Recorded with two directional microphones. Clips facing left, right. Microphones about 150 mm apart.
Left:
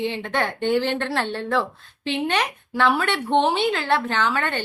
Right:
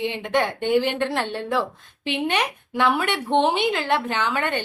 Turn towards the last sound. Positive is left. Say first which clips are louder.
# even
turn(degrees=-15)  # may be behind; listen again after turning